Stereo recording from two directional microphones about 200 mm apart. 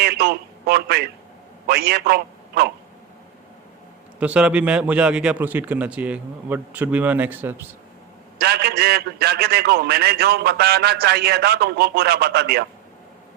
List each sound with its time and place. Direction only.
0.0 s a man's voice: 55° right (ahead or behind)
4.2 s a man's voice: 5° right (ahead or behind)
8.4 s a man's voice: 55° right (ahead or behind)